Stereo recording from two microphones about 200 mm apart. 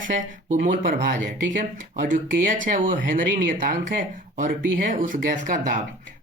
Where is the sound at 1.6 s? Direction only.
40° right (ahead or behind).